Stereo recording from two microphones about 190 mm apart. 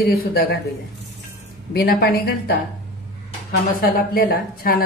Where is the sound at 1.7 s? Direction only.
55° left (ahead or behind).